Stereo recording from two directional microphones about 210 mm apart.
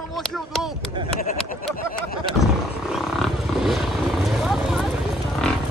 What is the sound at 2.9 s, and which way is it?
Wild animals, centre (ahead or behind).